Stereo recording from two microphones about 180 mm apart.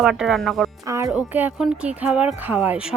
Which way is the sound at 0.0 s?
Centre (ahead or behind).